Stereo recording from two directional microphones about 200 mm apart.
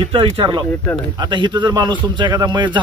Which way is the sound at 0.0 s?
25° right (ahead or behind).